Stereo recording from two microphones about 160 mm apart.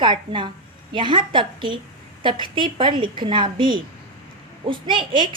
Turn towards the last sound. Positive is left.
turn(degrees=-30)  # may be behind; listen again after turning